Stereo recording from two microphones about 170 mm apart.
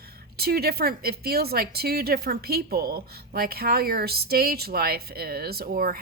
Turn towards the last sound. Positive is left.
turn(degrees=-60)  # may be behind; listen again after turning